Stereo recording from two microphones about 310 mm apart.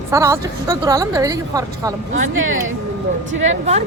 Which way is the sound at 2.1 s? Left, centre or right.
Right.